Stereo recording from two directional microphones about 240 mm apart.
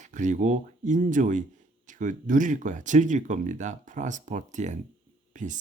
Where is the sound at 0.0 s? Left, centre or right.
Right.